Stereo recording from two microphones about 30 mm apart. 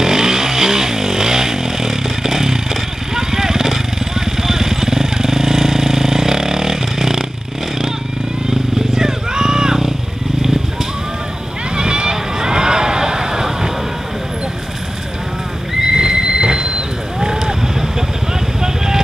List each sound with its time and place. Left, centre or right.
0.0 s vehicle: centre
8.5 s vehicle: right
11.7 s vehicle: right
15.8 s neigh: right